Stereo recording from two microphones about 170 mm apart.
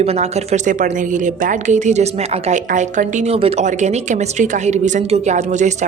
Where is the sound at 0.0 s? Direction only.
40° right (ahead or behind).